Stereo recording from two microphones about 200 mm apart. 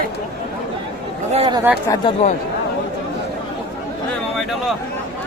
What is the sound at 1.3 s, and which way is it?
Chatter, 30° right (ahead or behind).